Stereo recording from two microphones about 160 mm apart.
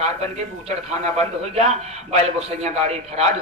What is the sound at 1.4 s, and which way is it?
A man's voice, 45° right (ahead or behind).